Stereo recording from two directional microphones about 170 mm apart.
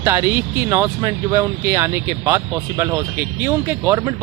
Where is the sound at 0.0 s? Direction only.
15° right (ahead or behind).